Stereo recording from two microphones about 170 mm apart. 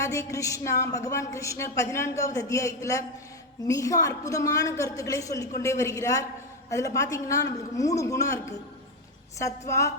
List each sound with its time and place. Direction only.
0.0 s a woman's voice: 20° left (ahead or behind)